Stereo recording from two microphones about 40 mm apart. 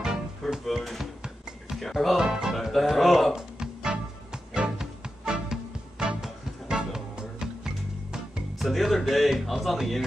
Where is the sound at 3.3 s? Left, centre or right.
Centre.